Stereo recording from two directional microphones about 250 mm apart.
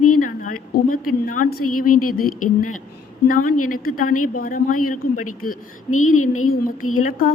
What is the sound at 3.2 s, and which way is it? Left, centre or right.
A woman's voice, left.